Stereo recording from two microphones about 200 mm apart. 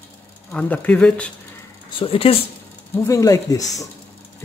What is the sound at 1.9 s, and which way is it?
Speech, 25° left (ahead or behind).